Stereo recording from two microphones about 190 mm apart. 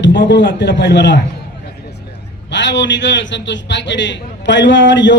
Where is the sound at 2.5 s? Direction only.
70° left (ahead or behind).